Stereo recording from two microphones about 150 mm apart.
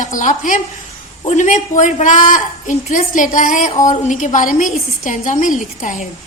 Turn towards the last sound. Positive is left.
turn(degrees=55)  # may be behind; listen again after turning